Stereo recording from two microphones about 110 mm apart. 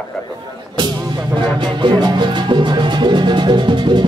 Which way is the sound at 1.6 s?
45° right (ahead or behind).